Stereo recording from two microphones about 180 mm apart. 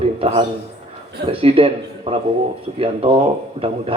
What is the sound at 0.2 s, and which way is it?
A man's voice, 30° right (ahead or behind).